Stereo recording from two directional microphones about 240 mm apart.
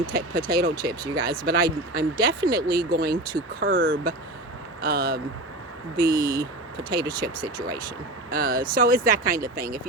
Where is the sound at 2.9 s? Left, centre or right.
Right.